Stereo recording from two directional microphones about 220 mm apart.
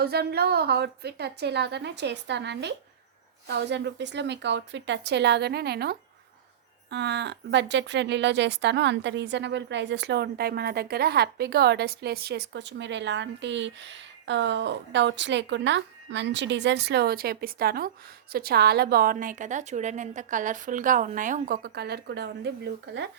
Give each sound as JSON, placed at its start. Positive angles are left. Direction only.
{"t": 0.0, "sound": "a woman's voice", "side_deg": -45}